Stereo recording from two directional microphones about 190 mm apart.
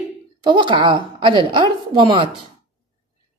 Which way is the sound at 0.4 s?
25° right (ahead or behind).